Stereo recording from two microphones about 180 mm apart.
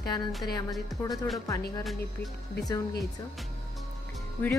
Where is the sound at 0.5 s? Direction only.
20° left (ahead or behind).